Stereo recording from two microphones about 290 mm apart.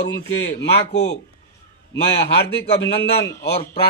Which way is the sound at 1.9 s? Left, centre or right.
Left.